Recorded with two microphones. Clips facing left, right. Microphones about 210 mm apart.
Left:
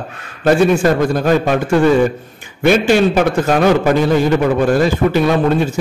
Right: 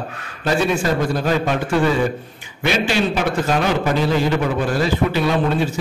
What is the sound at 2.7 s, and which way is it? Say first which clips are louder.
Speech: left 8 dB; 50° left (ahead or behind).